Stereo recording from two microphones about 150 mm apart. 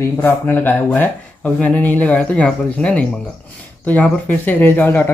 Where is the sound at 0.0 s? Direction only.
15° left (ahead or behind).